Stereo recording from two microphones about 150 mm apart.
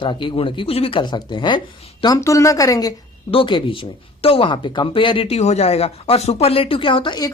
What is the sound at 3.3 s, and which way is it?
Speech, 35° left (ahead or behind).